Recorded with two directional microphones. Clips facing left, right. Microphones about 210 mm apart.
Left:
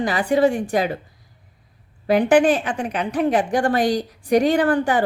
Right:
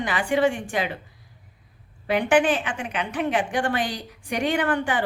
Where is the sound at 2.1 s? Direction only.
40° left (ahead or behind).